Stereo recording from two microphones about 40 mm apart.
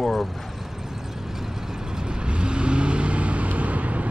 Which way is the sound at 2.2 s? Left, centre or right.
Right.